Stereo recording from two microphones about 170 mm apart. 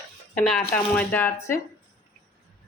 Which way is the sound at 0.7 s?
10° left (ahead or behind).